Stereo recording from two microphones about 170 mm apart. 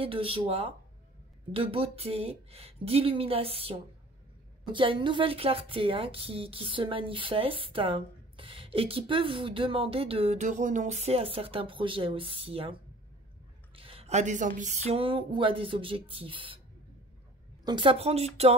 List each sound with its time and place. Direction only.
0.0 s a woman's voice: 35° right (ahead or behind)
13.7 s a sound: 35° right (ahead or behind)
14.6 s a woman's voice: 45° right (ahead or behind)
17.6 s a woman's voice: 30° right (ahead or behind)